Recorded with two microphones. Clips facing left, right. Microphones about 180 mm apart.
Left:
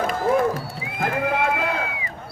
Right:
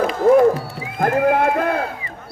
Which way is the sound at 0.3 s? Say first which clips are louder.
Right 9 dB; 55° right (ahead or behind).